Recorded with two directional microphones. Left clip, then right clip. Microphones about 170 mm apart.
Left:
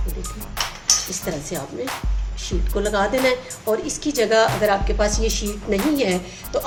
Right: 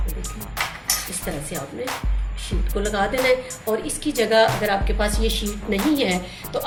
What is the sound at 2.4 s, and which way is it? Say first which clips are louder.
Speech: left 3 dB; 30° left (ahead or behind).